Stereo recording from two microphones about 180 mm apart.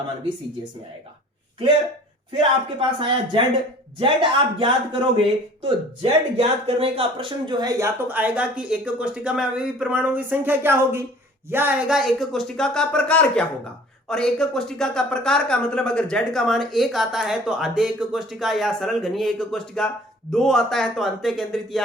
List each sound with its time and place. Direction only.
2.7 s speech: 30° right (ahead or behind); by 21.8 s centre (ahead or behind)